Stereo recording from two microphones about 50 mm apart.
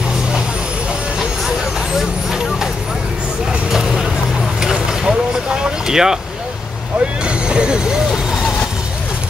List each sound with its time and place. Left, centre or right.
3.7 s vehicle: centre
7.2 s vehicle: centre